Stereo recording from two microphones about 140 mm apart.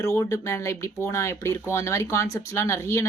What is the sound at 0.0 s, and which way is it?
Speech, 20° left (ahead or behind).